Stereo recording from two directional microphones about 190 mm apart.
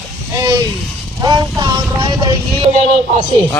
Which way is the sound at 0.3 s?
20° right (ahead or behind).